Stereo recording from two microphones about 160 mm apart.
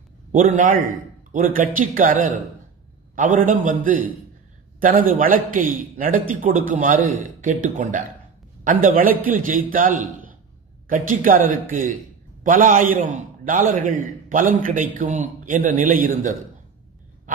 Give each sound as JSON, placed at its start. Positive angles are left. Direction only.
{"t": 0.3, "sound": "a man's voice", "side_deg": -55}
{"t": 4.7, "sound": "a man's voice", "side_deg": -60}